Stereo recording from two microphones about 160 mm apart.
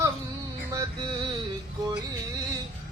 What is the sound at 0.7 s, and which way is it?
Music, 20° right (ahead or behind).